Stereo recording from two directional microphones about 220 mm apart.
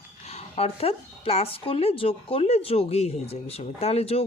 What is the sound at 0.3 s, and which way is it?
Speech, 30° left (ahead or behind).